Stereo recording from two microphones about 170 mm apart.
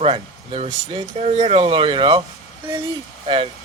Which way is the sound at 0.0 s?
35° right (ahead or behind).